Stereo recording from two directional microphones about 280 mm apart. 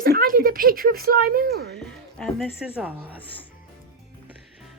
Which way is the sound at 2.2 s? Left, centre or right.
Centre.